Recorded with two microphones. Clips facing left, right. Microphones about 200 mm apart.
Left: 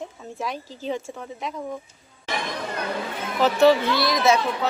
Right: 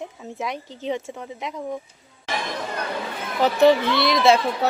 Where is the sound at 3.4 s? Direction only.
15° right (ahead or behind); by 4.7 s 30° right (ahead or behind).